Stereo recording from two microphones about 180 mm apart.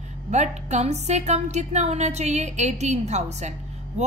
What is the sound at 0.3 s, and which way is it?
Speech, 40° right (ahead or behind).